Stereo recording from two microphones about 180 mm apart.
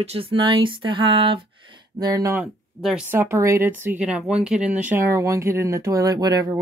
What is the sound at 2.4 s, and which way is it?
Speech, 5° right (ahead or behind).